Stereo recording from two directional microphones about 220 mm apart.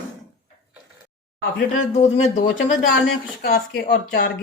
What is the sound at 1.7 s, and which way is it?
Speech, 30° left (ahead or behind).